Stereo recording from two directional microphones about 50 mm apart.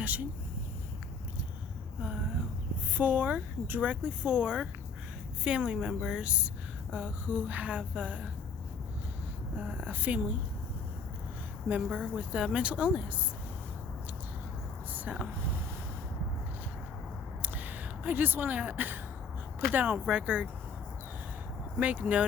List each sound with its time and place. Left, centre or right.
0.0 s speech: right
2.0 s speech: right
9.6 s speech: right
11.7 s speech: right
15.3 s a sound: right
17.4 s a sound: right
19.7 s speech: right
20.1 s speech: right
21.8 s speech: right